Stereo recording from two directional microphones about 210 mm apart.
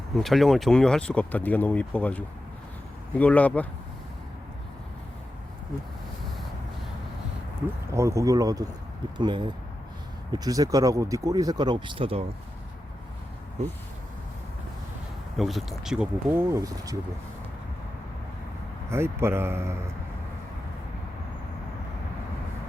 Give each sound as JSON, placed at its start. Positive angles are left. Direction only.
{"t": 0.2, "sound": "speech", "side_deg": 0}
{"t": 7.9, "sound": "speech", "side_deg": -15}
{"t": 15.4, "sound": "speech", "side_deg": 0}
{"t": 18.9, "sound": "speech", "side_deg": -10}